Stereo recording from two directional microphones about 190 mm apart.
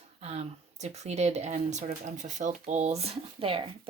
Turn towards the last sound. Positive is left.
turn(degrees=-30)  # may be behind; listen again after turning